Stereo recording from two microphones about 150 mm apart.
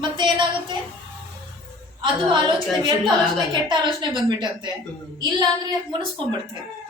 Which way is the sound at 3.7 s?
30° right (ahead or behind).